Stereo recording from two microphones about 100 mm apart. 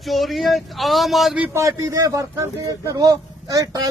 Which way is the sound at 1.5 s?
30° right (ahead or behind).